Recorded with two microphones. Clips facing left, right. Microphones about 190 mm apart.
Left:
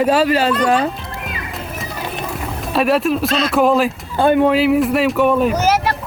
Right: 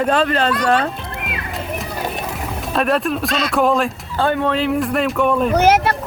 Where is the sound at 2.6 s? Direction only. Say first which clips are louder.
Left 3 dB; 5° left (ahead or behind).